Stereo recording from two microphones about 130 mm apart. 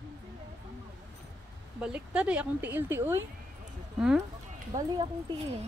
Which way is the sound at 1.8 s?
10° right (ahead or behind).